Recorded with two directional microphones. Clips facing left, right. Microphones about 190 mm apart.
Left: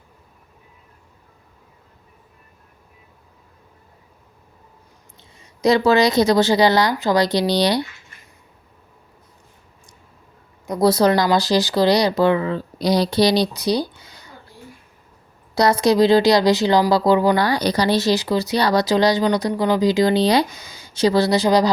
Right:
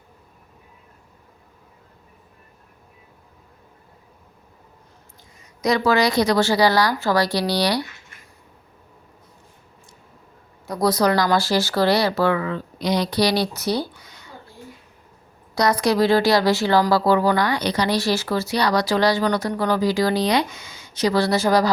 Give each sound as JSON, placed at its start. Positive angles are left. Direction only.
{"t": 5.6, "sound": "speech", "side_deg": 25}
{"t": 10.7, "sound": "speech", "side_deg": 25}
{"t": 15.5, "sound": "speech", "side_deg": 25}
{"t": 17.3, "sound": "speech", "side_deg": 35}
{"t": 17.9, "sound": "speech", "side_deg": 20}